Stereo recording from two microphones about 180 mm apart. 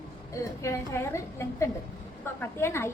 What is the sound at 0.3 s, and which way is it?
A woman's voice, 15° left (ahead or behind).